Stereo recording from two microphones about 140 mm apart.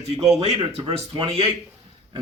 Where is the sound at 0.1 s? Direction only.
45° right (ahead or behind).